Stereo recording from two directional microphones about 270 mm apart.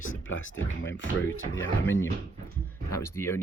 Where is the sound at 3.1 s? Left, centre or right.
Centre.